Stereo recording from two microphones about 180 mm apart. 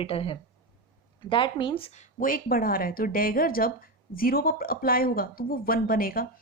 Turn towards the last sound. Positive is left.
turn(degrees=55)  # may be behind; listen again after turning